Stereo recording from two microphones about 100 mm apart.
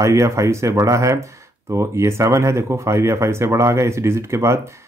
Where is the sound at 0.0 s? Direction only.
30° right (ahead or behind).